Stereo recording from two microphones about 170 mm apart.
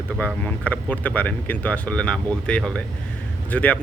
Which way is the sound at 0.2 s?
10° left (ahead or behind).